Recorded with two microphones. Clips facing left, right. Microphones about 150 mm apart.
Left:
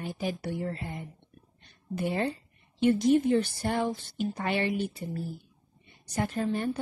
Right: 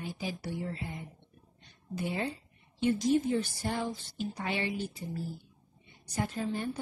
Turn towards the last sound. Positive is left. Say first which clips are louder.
# left 4 dB
turn(degrees=55)  # may be behind; listen again after turning